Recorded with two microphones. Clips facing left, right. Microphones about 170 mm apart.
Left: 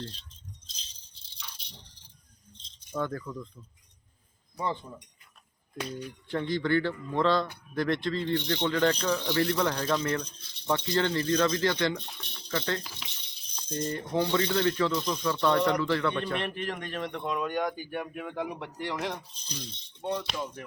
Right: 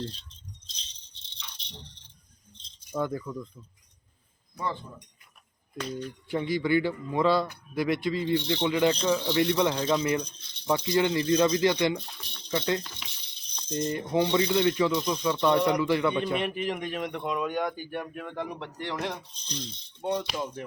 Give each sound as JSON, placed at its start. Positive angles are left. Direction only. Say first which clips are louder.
{"t": 0.7, "sound": "rattle", "louder": "right 2 dB", "side_deg": 5}
{"t": 2.9, "sound": "speech", "louder": "right 2 dB", "side_deg": -10}
{"t": 4.5, "sound": "speech", "louder": "left 1 dB", "side_deg": 20}
{"t": 6.2, "sound": "speech", "louder": "right 1 dB", "side_deg": -10}
{"t": 11.9, "sound": "speech", "louder": "right 1 dB", "side_deg": 0}
{"t": 12.5, "sound": "speech", "louder": "right 3 dB", "side_deg": -15}
{"t": 12.8, "sound": "speech", "louder": "even", "side_deg": 0}
{"t": 13.7, "sound": "speech", "louder": "right 3 dB", "side_deg": -15}
{"t": 20.0, "sound": "speech", "louder": "right 3 dB", "side_deg": -20}
{"t": 20.3, "sound": "music", "louder": "right 3 dB", "side_deg": -20}